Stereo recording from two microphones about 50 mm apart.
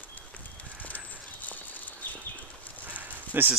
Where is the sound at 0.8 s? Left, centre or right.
Left.